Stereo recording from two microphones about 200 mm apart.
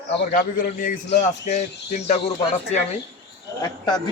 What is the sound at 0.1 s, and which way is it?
Speech, 55° left (ahead or behind).